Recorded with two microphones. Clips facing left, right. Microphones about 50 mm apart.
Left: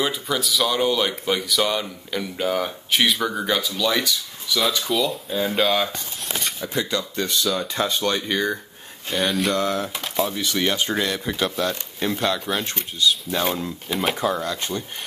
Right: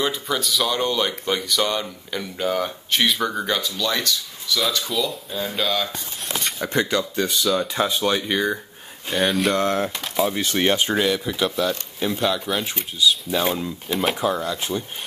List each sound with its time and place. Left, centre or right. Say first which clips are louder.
0.0 s speech: even; centre
6.2 s a sound: right 1 dB; centre
7.2 s speech: right 1 dB; centre
9.6 s speech: right 2 dB; right
9.9 s speech: right 2 dB; centre
10.3 s speech: right 2 dB; right
10.7 s speech: right 3 dB; right
11.1 s speech: right 1 dB; centre